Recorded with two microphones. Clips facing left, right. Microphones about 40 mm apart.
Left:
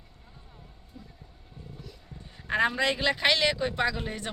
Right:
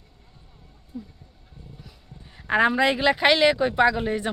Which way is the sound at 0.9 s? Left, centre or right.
Centre.